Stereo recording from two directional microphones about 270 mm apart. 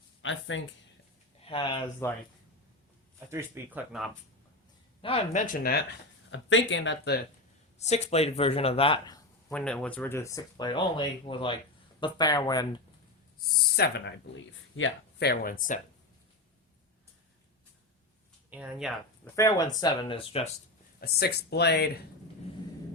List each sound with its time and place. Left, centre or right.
0.2 s speech: left
1.4 s speech: centre
3.3 s speech: centre
5.0 s speech: left
6.3 s speech: left
7.8 s speech: left
9.5 s speech: centre
13.5 s speech: left
18.5 s speech: centre
19.4 s speech: centre
21.0 s speech: left